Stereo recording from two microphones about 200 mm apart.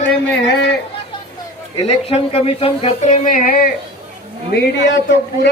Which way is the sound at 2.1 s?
30° left (ahead or behind).